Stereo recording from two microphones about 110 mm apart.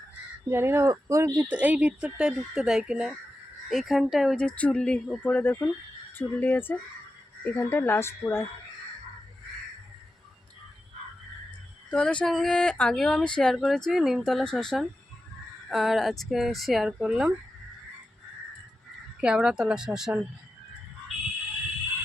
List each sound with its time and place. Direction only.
0.5 s speech: 20° right (ahead or behind)
1.5 s speech: 15° right (ahead or behind)
4.4 s speech: 10° left (ahead or behind)
5.3 s speech: 20° left (ahead or behind)
11.9 s speech: 10° left (ahead or behind); by 17.3 s 10° right (ahead or behind)
19.2 s speech: 10° right (ahead or behind)